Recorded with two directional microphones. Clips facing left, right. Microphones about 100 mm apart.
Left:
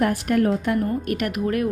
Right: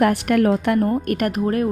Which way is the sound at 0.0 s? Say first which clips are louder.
Right 3 dB; 75° right (ahead or behind).